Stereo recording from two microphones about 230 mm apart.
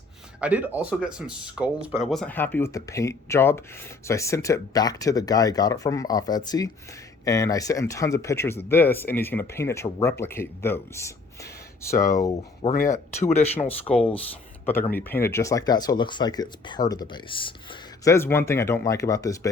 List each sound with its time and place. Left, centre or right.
0.3 s speech: centre
12.7 s speech: left
14.9 s speech: centre